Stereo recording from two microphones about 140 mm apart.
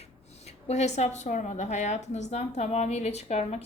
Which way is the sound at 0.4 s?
50° left (ahead or behind).